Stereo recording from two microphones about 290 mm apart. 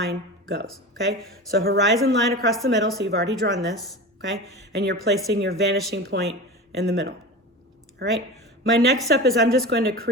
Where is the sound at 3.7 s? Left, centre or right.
Centre.